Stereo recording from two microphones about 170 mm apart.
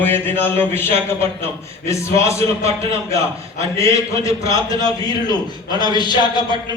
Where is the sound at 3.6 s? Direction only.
20° left (ahead or behind).